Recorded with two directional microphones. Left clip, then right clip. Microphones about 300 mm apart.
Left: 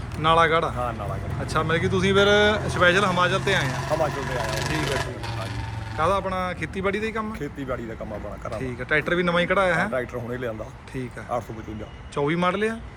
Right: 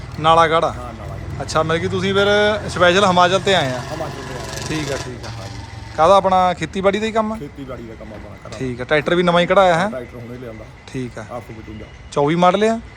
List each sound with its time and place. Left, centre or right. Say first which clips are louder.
0.2 s speech: right 6 dB; centre
6.0 s speech: right 12 dB; centre
8.4 s speech: right 6 dB; centre
12.1 s speech: right 9 dB; centre